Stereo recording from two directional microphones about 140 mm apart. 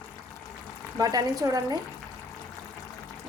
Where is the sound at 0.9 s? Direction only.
25° right (ahead or behind).